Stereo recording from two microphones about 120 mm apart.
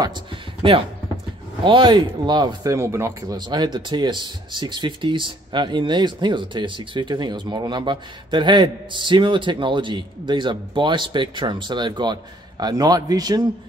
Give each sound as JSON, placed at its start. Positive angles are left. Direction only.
{"t": 0.6, "sound": "speech", "side_deg": -50}
{"t": 1.6, "sound": "speech", "side_deg": -40}